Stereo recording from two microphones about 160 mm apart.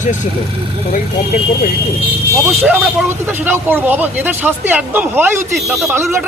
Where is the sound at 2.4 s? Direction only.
15° right (ahead or behind).